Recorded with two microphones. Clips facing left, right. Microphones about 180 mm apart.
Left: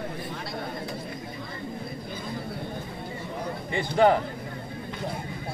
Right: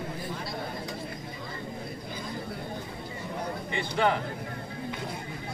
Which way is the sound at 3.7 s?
45° left (ahead or behind).